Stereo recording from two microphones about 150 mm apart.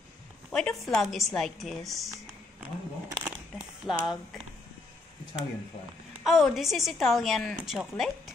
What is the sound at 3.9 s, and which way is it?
Speech, centre (ahead or behind).